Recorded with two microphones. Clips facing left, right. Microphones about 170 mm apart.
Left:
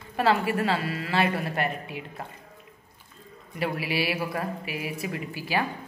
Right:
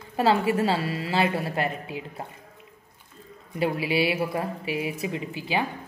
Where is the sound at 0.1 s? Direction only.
25° right (ahead or behind).